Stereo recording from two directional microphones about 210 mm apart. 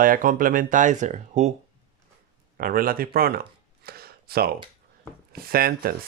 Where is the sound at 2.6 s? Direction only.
45° right (ahead or behind).